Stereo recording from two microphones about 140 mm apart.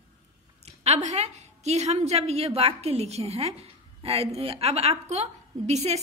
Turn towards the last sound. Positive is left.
turn(degrees=-50)  # may be behind; listen again after turning